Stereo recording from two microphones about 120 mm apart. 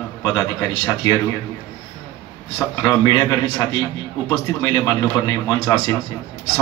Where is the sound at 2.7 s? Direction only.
35° left (ahead or behind).